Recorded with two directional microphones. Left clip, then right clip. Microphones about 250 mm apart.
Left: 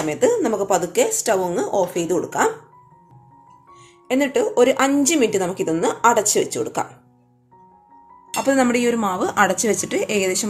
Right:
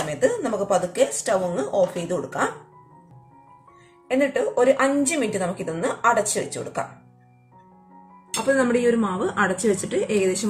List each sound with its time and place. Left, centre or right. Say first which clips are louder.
0.1 s a woman's voice: left 5 dB; left
4.1 s a woman's voice: left 2 dB; left
8.5 s a woman's voice: even; left